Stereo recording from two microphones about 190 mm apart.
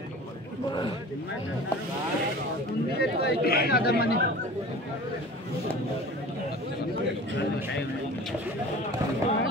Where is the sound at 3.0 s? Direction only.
55° left (ahead or behind).